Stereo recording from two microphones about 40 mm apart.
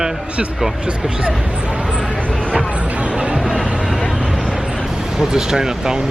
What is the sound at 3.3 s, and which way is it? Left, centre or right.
Music, centre.